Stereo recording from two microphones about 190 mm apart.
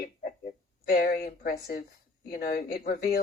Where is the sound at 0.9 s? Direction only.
55° left (ahead or behind).